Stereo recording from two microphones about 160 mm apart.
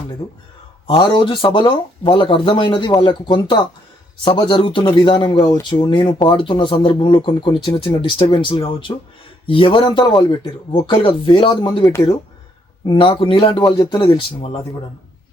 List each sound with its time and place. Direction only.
0.2 s speech: 25° left (ahead or behind)